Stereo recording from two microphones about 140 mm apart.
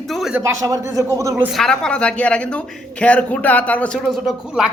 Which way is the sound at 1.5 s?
Centre (ahead or behind).